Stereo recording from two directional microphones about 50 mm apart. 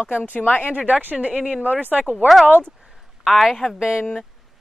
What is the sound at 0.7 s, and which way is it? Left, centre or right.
Speech, right.